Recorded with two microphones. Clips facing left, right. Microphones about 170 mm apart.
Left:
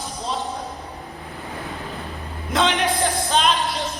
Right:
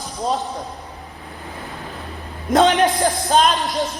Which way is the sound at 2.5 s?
45° right (ahead or behind).